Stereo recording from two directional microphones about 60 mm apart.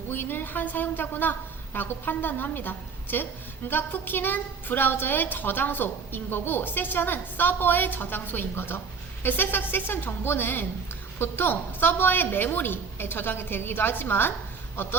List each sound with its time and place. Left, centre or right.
0.1 s a woman's voice: left